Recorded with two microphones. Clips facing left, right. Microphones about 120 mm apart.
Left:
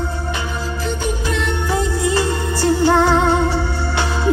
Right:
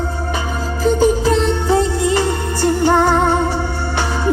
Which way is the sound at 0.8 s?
35° right (ahead or behind).